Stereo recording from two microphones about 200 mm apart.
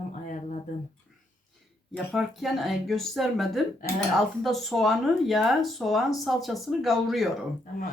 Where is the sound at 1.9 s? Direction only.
Centre (ahead or behind).